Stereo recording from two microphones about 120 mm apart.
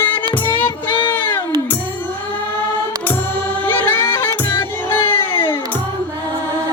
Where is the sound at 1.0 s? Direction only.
15° left (ahead or behind).